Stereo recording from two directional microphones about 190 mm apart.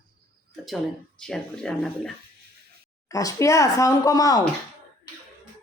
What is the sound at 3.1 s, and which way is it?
Speech, 20° left (ahead or behind).